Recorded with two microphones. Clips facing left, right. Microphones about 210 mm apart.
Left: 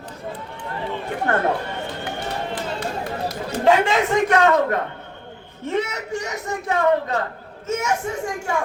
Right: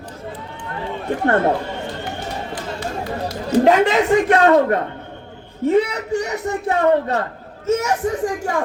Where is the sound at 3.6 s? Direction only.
40° right (ahead or behind).